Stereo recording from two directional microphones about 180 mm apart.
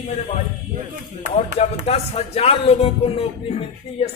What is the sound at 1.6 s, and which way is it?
Speech, 35° left (ahead or behind).